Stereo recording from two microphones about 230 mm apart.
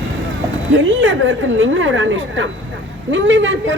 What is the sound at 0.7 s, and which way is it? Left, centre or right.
A woman's voice, right.